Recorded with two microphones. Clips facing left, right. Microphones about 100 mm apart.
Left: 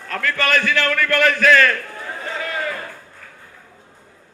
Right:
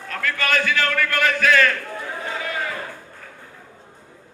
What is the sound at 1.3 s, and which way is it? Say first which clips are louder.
Speech: left 3 dB; 45° left (ahead or behind).